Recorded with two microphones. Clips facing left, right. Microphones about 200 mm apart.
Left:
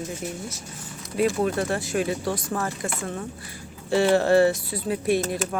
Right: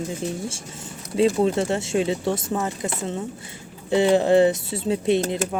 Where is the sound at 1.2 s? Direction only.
25° right (ahead or behind).